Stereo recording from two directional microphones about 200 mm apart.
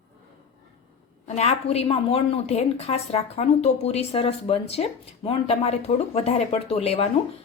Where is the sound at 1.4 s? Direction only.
30° left (ahead or behind).